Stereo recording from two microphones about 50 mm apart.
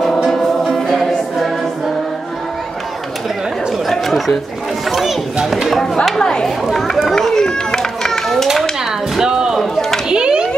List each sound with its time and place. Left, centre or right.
0.3 s music: centre
3.8 s chatter: centre
4.8 s speech: centre
6.1 s chatter: centre
6.6 s chatter: centre
7.1 s run: centre
8.5 s dishes: centre
9.2 s a sound: centre
9.6 s a sound: centre
10.0 s children playing: centre